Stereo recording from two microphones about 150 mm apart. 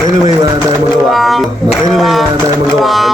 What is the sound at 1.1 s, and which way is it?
Music, centre (ahead or behind).